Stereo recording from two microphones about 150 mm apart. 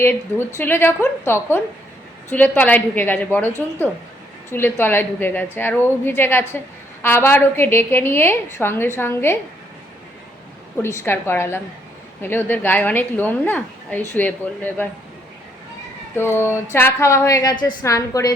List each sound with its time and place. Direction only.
0.0 s a woman's voice: 15° left (ahead or behind)
4.5 s a woman's voice: 15° left (ahead or behind)
10.8 s a woman's voice: 15° left (ahead or behind)
16.1 s a woman's voice: 15° left (ahead or behind)